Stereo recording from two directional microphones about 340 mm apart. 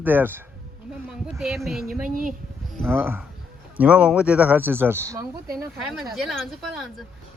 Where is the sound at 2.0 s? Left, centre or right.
Right.